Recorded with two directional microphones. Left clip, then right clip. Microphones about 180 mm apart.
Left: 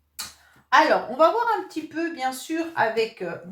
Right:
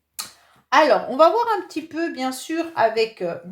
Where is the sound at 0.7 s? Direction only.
45° right (ahead or behind).